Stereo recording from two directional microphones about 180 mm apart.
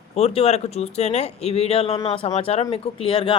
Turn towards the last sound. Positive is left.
turn(degrees=30)  # may be behind; listen again after turning